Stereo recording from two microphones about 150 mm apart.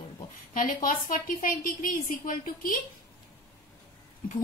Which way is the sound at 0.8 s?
65° left (ahead or behind).